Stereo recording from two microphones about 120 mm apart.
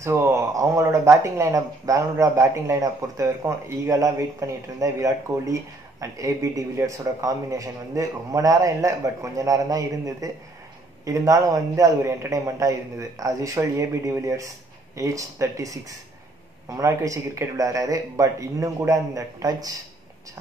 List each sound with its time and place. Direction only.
0.0 s speech: 25° right (ahead or behind)